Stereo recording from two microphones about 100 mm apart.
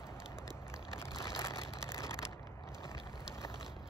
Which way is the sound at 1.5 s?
30° left (ahead or behind).